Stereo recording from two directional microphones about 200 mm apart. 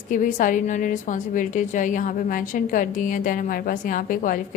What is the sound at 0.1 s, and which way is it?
A woman's voice, 40° left (ahead or behind).